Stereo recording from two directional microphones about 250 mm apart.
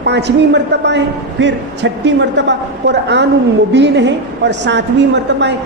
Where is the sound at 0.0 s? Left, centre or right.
Right.